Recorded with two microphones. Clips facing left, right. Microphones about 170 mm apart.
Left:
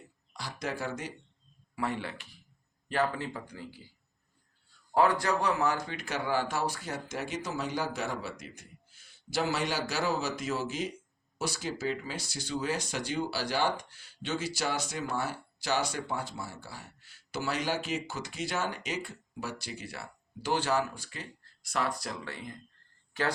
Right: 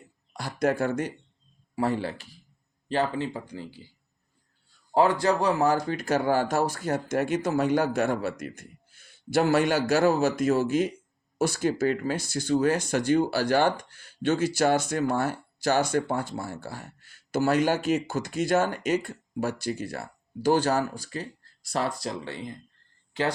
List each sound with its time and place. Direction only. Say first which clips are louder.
0.3 s speech: right 11 dB; 50° right (ahead or behind)
1.7 s speech: right 7 dB; 35° right (ahead or behind)
4.9 s speech: right 4 dB; 25° right (ahead or behind)